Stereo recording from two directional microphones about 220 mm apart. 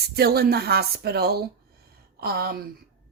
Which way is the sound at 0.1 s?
45° right (ahead or behind).